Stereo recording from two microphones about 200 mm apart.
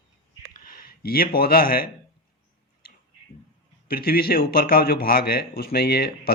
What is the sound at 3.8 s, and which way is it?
Speech, 50° left (ahead or behind).